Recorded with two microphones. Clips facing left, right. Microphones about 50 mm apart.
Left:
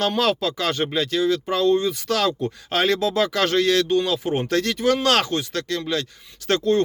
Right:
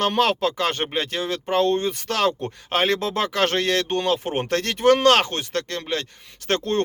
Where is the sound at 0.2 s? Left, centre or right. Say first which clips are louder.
Right 1 dB; right.